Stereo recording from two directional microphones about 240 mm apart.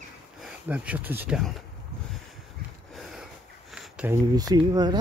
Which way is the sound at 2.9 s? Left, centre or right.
Centre.